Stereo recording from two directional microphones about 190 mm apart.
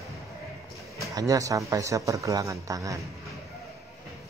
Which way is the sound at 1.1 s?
20° right (ahead or behind).